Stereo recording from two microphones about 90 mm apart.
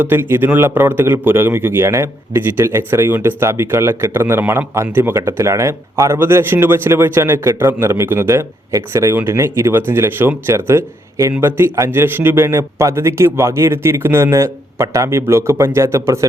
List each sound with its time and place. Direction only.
0.0 s a man's voice: 25° right (ahead or behind)